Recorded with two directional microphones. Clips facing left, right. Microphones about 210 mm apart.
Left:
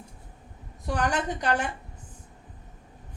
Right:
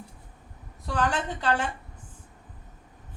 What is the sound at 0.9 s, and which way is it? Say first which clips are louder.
Speech: even; 15° left (ahead or behind).